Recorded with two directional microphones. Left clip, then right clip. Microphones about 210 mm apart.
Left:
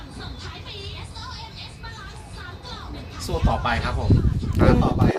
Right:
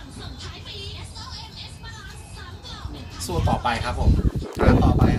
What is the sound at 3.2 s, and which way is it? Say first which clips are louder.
Speech: even; centre (ahead or behind).